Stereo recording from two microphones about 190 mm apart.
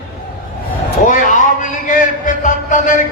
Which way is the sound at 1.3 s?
40° left (ahead or behind).